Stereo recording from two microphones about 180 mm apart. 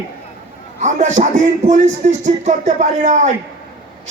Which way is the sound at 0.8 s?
45° right (ahead or behind).